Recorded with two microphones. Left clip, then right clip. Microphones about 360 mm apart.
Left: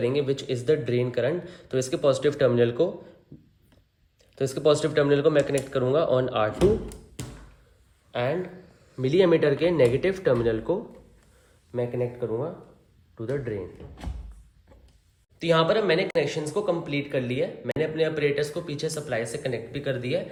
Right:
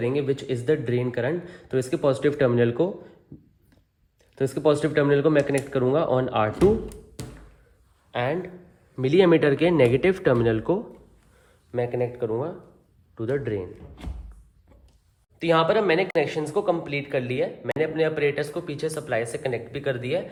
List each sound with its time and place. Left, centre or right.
0.0 s speech: centre
4.4 s speech: centre
6.8 s music: centre
8.1 s speech: centre
11.7 s speech: right
15.4 s speech: centre